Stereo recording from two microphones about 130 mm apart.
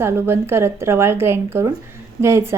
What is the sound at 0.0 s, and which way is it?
A woman's voice, 20° right (ahead or behind).